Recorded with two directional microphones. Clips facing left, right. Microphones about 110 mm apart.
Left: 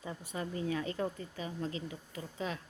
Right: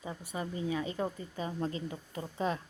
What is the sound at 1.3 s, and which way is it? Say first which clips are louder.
A woman's voice: right 3 dB; 35° right (ahead or behind).